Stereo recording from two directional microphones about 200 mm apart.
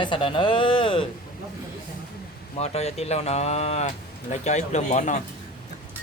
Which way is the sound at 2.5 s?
30° left (ahead or behind).